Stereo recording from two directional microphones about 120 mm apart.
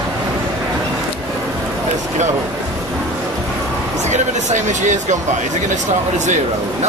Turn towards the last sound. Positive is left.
turn(degrees=-90)